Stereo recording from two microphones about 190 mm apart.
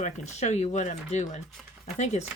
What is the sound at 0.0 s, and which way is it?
Speech, 35° left (ahead or behind).